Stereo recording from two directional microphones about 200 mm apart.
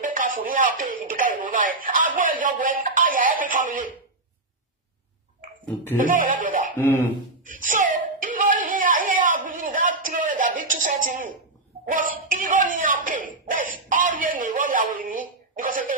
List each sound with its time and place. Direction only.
0.0 s speech: 40° right (ahead or behind)
5.6 s music: 10° left (ahead or behind)
6.0 s speech: 40° right (ahead or behind)
6.7 s music: 10° left (ahead or behind)
7.4 s a sound: 40° right (ahead or behind)
11.9 s speech: 45° right (ahead or behind)